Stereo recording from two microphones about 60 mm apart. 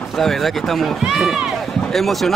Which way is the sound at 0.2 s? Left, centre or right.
Centre.